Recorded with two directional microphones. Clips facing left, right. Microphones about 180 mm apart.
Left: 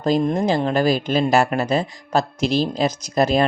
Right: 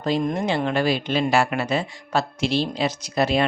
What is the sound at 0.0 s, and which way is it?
Speech, 35° left (ahead or behind).